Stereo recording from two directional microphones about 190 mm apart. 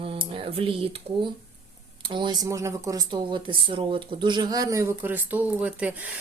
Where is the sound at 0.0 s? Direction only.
30° right (ahead or behind).